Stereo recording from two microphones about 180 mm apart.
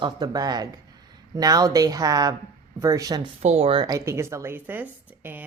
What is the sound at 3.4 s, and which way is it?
A woman's voice, 35° right (ahead or behind).